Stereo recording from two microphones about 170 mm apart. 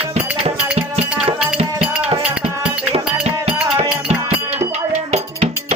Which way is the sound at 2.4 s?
40° right (ahead or behind).